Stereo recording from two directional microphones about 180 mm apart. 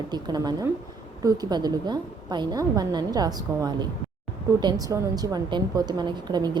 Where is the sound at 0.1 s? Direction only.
20° right (ahead or behind).